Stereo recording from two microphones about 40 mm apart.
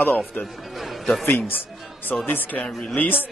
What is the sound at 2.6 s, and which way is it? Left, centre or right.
Speech, left.